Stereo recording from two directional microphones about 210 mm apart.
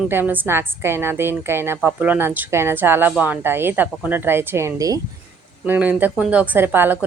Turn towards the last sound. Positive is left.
turn(degrees=-10)  # may be behind; listen again after turning